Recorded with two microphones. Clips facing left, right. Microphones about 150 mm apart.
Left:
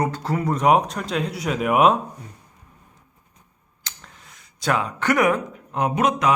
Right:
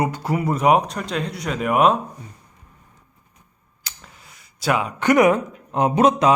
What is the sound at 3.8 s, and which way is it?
Speech, 5° right (ahead or behind).